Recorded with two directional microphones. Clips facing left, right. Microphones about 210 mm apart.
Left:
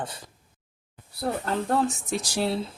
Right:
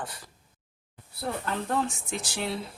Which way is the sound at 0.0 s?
20° left (ahead or behind).